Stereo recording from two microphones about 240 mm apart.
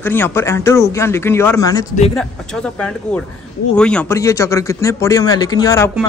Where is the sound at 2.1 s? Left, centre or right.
Centre.